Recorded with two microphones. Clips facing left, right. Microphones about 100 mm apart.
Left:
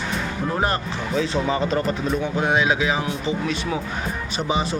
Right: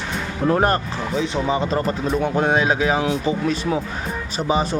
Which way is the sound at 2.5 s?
40° right (ahead or behind).